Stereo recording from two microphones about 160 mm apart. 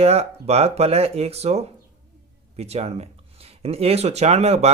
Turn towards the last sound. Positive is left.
turn(degrees=-40)  # may be behind; listen again after turning